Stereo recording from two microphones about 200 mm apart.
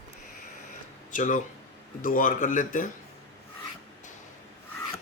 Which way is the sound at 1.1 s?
40° left (ahead or behind).